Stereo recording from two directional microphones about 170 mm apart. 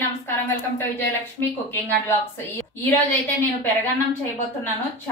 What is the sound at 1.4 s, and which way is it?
Speech, 10° left (ahead or behind).